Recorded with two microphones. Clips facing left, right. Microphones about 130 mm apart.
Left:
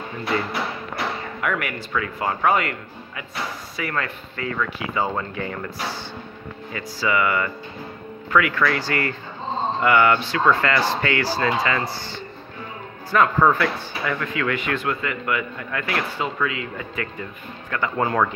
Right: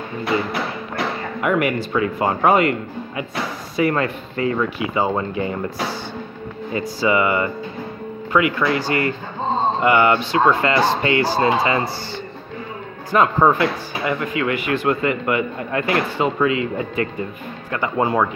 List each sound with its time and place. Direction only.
1.4 s speech: 20° right (ahead or behind)
6.7 s speech: 20° right (ahead or behind)
13.1 s speech: 20° right (ahead or behind)
14.9 s speech: 25° right (ahead or behind); by 18.3 s 10° right (ahead or behind)